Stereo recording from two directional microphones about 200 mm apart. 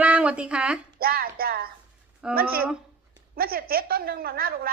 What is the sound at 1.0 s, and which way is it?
Speech, 50° right (ahead or behind).